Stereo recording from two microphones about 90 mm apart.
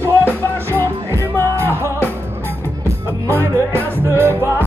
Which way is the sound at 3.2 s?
25° left (ahead or behind).